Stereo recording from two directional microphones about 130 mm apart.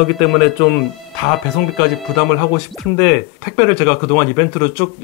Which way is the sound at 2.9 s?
20° left (ahead or behind).